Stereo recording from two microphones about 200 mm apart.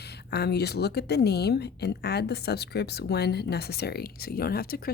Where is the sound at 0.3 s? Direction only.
55° left (ahead or behind).